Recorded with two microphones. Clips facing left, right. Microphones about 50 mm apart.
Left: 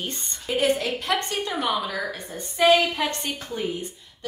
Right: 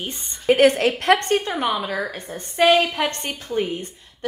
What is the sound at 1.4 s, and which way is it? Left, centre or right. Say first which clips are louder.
Speech: right 2 dB; right.